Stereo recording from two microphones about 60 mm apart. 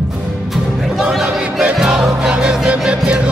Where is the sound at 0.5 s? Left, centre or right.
Centre.